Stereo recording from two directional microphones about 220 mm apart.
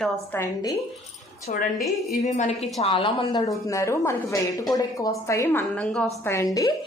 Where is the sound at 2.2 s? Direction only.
30° left (ahead or behind).